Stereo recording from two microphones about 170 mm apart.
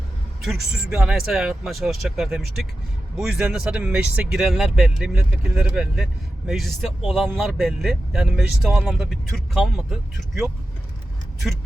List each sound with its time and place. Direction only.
0.4 s speech: centre (ahead or behind)